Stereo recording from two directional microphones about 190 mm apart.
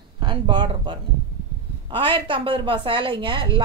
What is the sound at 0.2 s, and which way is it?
A woman's voice, 25° right (ahead or behind).